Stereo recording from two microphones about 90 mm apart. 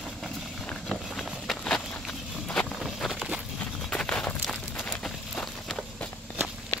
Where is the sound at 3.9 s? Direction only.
10° left (ahead or behind).